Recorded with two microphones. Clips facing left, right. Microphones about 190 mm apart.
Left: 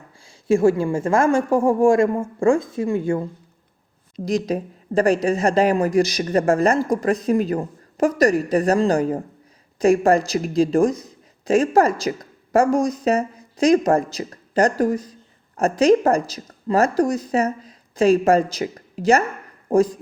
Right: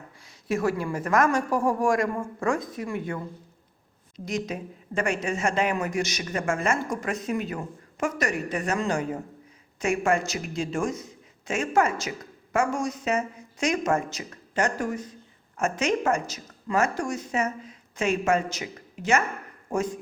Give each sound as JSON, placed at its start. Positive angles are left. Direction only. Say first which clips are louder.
{"t": 0.4, "sound": "a woman's voice", "louder": "left 9 dB", "side_deg": 25}
{"t": 4.3, "sound": "speech", "louder": "left 8 dB", "side_deg": 35}